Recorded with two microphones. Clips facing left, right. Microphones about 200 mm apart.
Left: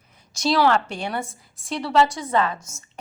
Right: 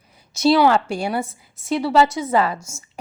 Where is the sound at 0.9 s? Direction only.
10° right (ahead or behind).